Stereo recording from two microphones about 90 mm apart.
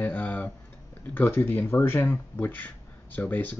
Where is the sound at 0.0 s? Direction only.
20° left (ahead or behind).